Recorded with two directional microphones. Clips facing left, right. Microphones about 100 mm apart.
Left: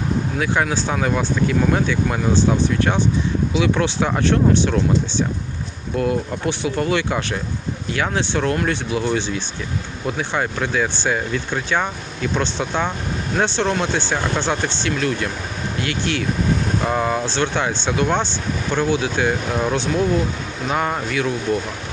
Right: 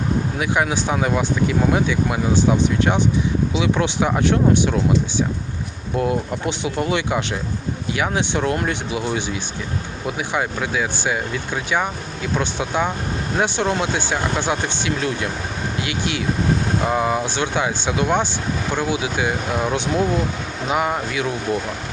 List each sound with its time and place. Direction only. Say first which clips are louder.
0.3 s speech: left 1 dB; 15° right (ahead or behind)